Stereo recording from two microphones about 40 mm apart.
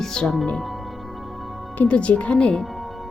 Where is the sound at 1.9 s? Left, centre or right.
Left.